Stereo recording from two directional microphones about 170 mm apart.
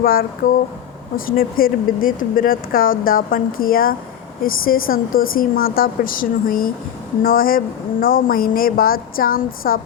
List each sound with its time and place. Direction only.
0.0 s speech: 60° left (ahead or behind)